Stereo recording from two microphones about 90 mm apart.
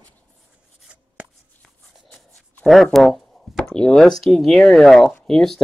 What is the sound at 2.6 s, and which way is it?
Speech, centre (ahead or behind).